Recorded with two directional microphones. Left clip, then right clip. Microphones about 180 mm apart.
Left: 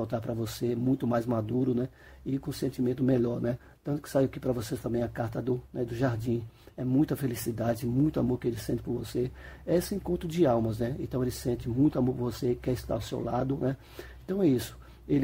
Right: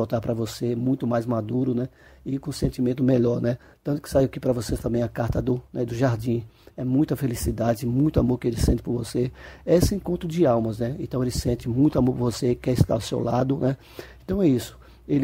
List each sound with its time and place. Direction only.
0.0 s speech: 30° right (ahead or behind)